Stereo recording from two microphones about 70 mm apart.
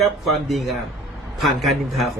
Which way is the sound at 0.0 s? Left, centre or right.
Centre.